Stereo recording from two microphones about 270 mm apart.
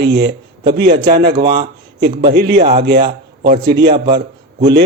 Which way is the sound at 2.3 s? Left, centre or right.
Right.